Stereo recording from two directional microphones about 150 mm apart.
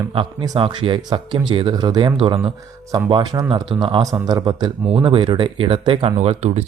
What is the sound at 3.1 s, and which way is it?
A man's voice, 25° right (ahead or behind).